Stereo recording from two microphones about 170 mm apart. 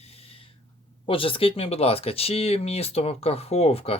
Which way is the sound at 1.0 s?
30° left (ahead or behind).